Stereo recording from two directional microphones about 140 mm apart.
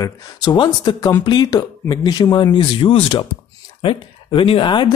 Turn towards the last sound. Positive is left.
turn(degrees=35)  # may be behind; listen again after turning